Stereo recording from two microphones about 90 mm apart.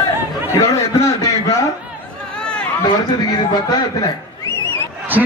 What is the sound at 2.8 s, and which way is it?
A man's voice, 50° left (ahead or behind).